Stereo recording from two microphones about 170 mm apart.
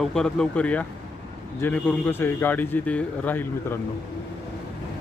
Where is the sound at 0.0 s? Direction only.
5° left (ahead or behind).